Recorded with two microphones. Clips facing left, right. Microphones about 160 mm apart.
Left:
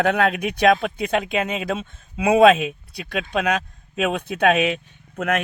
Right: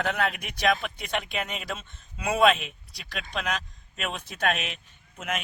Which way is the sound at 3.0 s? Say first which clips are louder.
Left 10 dB; 60° left (ahead or behind).